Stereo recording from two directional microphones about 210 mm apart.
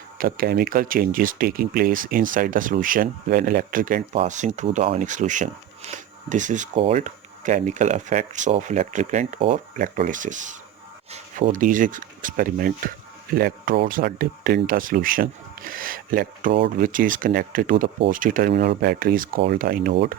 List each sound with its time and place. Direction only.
0.2 s speech: 45° right (ahead or behind)